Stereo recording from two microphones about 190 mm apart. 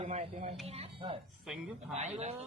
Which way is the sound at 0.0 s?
35° right (ahead or behind).